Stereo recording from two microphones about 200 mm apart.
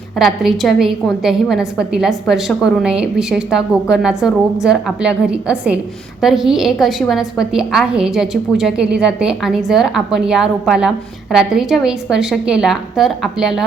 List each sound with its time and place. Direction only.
0.2 s a woman's voice: centre (ahead or behind)